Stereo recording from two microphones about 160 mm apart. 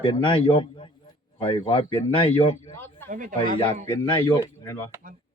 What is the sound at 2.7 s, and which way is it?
Speech, 15° left (ahead or behind).